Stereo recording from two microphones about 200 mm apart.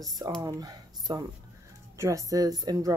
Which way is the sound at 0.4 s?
20° right (ahead or behind).